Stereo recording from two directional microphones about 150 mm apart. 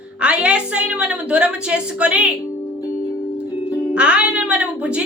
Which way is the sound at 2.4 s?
20° left (ahead or behind).